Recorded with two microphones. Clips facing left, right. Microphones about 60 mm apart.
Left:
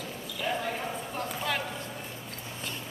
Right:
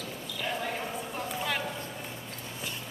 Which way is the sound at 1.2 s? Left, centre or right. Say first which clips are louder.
Left 1 dB; centre.